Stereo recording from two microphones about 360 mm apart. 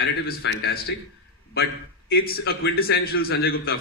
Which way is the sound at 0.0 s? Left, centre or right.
Left.